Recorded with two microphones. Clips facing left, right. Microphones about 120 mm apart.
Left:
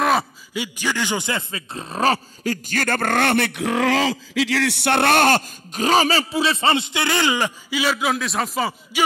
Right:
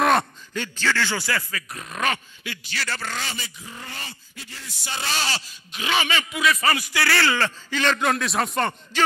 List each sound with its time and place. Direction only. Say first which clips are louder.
0.0 s speech: even; 5° left (ahead or behind)